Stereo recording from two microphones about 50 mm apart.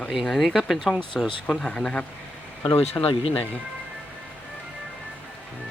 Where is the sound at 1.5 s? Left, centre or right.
Centre.